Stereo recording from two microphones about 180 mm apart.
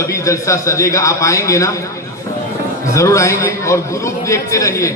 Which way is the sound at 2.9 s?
15° left (ahead or behind).